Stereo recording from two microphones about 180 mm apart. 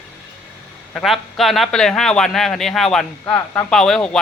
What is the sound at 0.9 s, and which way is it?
A man's voice, centre (ahead or behind).